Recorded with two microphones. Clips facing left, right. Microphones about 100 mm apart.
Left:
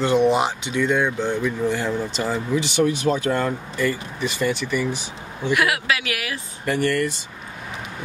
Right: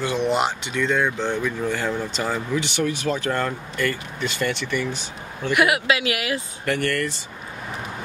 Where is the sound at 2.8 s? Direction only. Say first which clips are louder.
Left 3 dB; 20° left (ahead or behind).